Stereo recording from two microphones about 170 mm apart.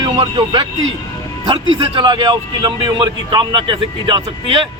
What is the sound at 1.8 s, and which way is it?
A man's voice, 30° right (ahead or behind).